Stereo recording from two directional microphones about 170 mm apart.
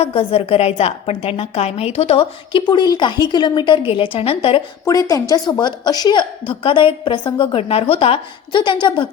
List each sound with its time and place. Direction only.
0.0 s a woman's voice: 35° left (ahead or behind)
4.9 s a woman's voice: 20° left (ahead or behind)